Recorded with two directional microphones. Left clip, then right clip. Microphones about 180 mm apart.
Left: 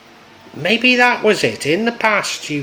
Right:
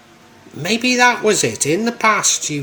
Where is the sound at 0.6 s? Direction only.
30° right (ahead or behind).